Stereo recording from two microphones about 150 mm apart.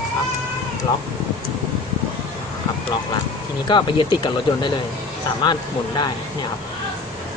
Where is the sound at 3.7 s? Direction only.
30° left (ahead or behind).